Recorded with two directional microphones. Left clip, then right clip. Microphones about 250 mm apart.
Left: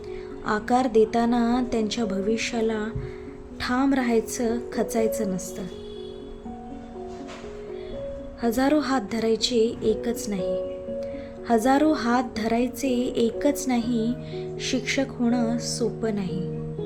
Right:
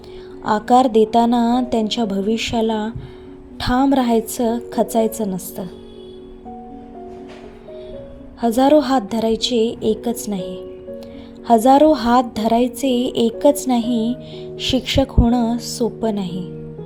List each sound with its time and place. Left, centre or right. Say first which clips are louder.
0.4 s a woman's voice: right 9 dB; centre
8.4 s a woman's voice: right 9 dB; centre